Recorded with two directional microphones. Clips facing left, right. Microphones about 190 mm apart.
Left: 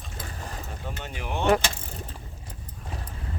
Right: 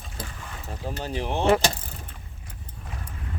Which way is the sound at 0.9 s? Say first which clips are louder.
Right 6 dB; 35° right (ahead or behind).